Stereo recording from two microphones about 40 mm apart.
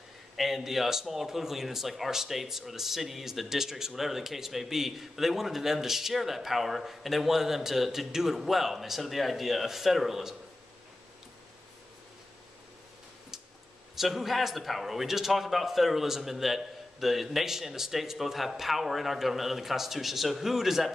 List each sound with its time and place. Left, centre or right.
0.4 s speech: centre
13.9 s a man's voice: centre